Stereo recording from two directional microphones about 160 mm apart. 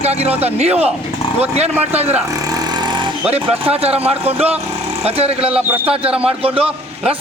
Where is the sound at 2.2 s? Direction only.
20° right (ahead or behind).